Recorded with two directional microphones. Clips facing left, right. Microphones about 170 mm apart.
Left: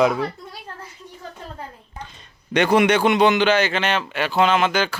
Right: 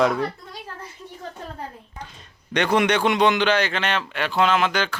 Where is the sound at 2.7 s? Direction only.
5° left (ahead or behind).